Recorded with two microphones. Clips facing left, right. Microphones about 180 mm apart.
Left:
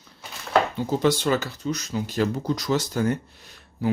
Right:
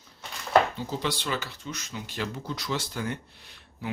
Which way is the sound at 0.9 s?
45° left (ahead or behind).